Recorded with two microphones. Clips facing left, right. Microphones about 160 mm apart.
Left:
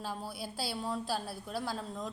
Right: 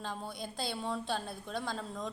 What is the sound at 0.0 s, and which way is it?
A woman's voice, 5° left (ahead or behind).